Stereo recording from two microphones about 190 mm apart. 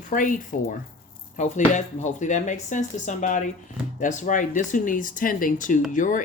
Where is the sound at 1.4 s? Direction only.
40° left (ahead or behind).